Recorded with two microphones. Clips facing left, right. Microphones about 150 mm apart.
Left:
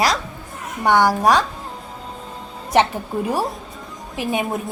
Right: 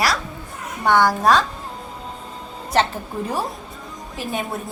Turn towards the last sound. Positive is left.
turn(degrees=15)  # may be behind; listen again after turning